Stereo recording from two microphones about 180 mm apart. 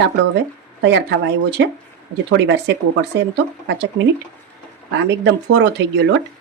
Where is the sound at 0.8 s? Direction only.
75° right (ahead or behind).